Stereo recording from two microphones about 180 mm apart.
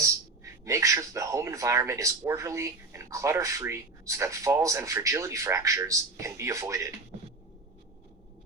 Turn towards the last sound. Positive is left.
turn(degrees=-15)  # may be behind; listen again after turning